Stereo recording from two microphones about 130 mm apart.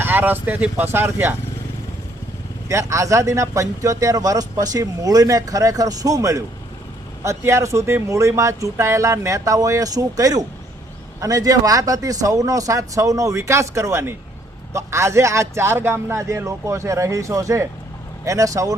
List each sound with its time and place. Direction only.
0.0 s speech: 15° right (ahead or behind)
2.6 s speech: 25° right (ahead or behind)